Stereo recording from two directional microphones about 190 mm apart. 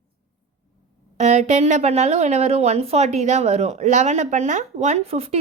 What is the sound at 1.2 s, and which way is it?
Speech, 35° right (ahead or behind).